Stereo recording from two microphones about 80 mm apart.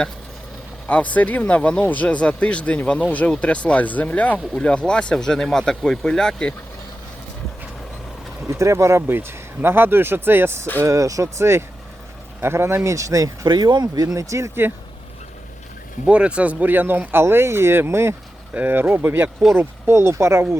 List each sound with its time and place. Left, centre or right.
0.9 s speech: centre
8.4 s speech: right
10.8 s speech: right
16.0 s speech: centre; by 20.6 s right